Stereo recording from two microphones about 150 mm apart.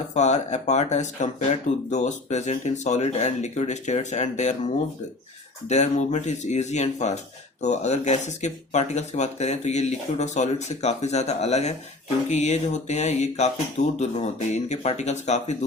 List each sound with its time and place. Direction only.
0.1 s speech: 50° left (ahead or behind)
5.6 s speech: 50° left (ahead or behind)